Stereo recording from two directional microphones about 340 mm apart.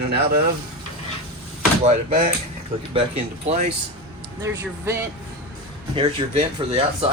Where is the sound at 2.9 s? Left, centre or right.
Centre.